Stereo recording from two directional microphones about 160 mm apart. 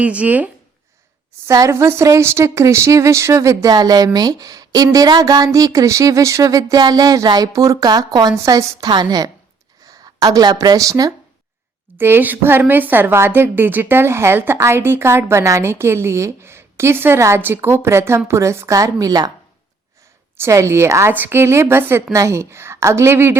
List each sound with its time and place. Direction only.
0.0 s a woman's voice: 10° right (ahead or behind)
1.5 s a woman's voice: 20° right (ahead or behind)
20.3 s a woman's voice: 15° right (ahead or behind)